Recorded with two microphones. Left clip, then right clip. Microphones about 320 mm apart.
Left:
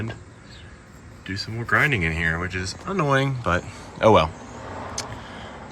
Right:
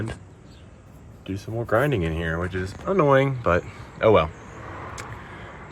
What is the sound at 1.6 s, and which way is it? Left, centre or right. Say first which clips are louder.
Speech: left 2 dB; centre.